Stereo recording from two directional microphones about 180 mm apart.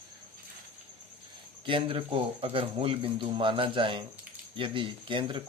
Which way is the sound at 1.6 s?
30° right (ahead or behind).